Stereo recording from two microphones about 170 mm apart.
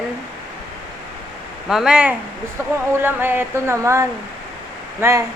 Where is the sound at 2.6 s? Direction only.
15° right (ahead or behind).